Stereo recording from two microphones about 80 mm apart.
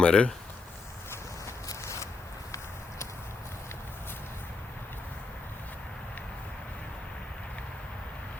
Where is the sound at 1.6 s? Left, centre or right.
Left.